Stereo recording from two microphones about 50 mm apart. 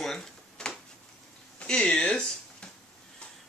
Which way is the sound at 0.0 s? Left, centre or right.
Centre.